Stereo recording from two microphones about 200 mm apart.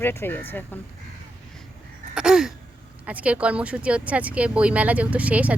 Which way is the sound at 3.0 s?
5° right (ahead or behind).